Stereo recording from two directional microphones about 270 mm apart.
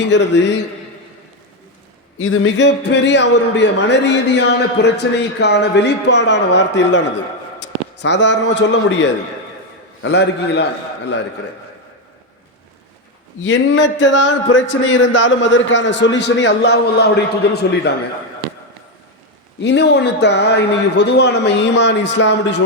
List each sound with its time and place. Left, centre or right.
0.0 s a man's voice: left
2.1 s a man's voice: left
13.4 s a man's voice: left
19.6 s a man's voice: left